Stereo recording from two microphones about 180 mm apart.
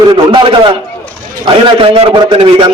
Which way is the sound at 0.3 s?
25° right (ahead or behind).